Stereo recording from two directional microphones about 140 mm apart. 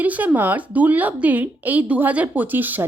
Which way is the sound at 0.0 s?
10° right (ahead or behind).